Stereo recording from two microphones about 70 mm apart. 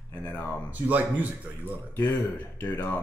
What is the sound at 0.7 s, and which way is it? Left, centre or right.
Speech, right.